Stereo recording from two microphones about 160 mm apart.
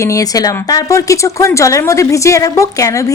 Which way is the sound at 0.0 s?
20° left (ahead or behind).